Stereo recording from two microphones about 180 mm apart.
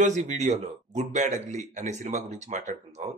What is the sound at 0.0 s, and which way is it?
Speech, 40° right (ahead or behind).